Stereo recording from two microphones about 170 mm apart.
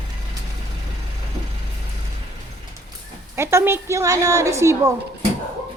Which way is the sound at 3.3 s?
15° right (ahead or behind).